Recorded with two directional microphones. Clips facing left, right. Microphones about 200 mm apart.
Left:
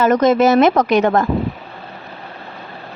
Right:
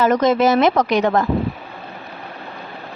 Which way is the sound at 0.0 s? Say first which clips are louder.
Left 2 dB; 50° left (ahead or behind).